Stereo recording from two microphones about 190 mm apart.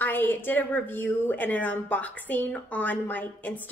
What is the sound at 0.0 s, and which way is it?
A woman's voice, 10° left (ahead or behind).